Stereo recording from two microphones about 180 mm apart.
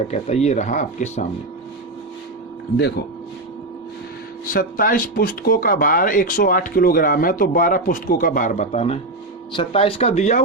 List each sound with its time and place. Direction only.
0.1 s speech: 35° left (ahead or behind)
4.4 s speech: 50° left (ahead or behind)
9.5 s speech: 30° left (ahead or behind)